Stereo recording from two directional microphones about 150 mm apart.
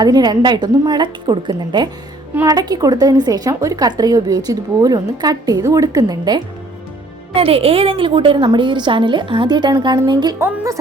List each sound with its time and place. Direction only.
0.0 s a woman's voice: 25° right (ahead or behind)
7.3 s a woman's voice: 40° right (ahead or behind)
10.3 s a woman's voice: 20° right (ahead or behind)